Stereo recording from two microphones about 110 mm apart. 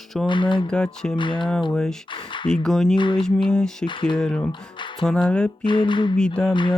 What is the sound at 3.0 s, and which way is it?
Speech, 45° left (ahead or behind).